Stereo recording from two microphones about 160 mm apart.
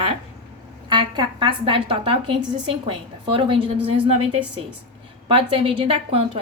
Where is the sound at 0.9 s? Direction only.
30° right (ahead or behind).